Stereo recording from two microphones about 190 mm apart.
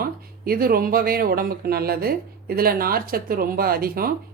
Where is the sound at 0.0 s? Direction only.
50° right (ahead or behind).